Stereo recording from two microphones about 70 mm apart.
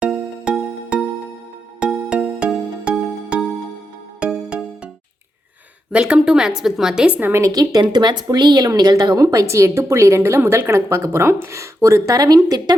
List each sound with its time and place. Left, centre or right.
0.0 s music: centre
5.9 s a woman's voice: centre
7.5 s speech: right
9.2 s a woman's voice: right